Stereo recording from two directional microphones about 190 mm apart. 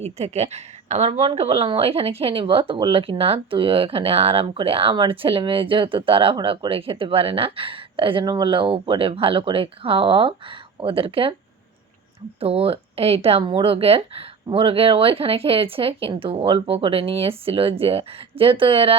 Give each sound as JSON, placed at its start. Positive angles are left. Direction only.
{"t": 0.0, "sound": "speech", "side_deg": -35}
{"t": 12.4, "sound": "speech", "side_deg": -30}